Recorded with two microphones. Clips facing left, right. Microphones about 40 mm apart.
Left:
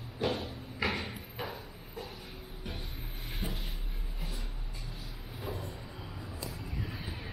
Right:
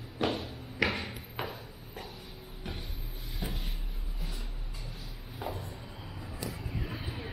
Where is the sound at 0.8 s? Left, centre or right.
Right.